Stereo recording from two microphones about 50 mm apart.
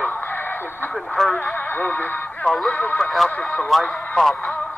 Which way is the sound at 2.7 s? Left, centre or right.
Left.